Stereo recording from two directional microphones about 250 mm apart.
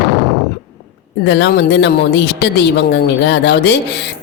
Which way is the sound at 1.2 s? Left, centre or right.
Left.